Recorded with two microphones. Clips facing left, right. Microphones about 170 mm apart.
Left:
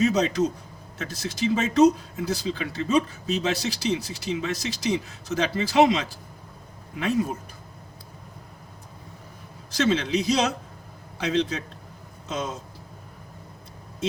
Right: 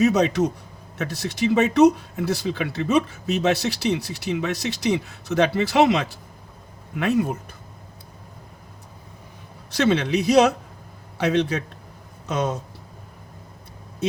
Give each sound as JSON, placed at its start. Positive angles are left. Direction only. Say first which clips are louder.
{"t": 0.0, "sound": "speech", "louder": "right 3 dB", "side_deg": -65}
{"t": 9.7, "sound": "speech", "louder": "right 3 dB", "side_deg": -60}